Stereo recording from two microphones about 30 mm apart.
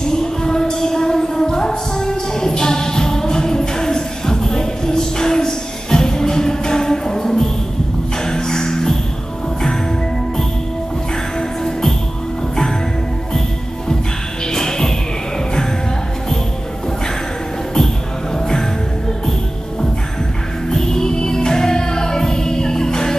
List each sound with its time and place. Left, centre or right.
0.1 s music: left
11.3 s music: centre
14.5 s music: centre
18.3 s music: centre
20.7 s music: centre